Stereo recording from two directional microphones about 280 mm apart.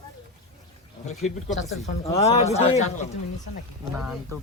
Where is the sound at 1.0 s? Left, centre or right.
Left.